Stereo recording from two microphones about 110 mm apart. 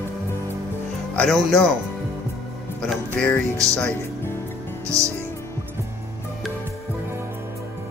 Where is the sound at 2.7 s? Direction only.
10° left (ahead or behind).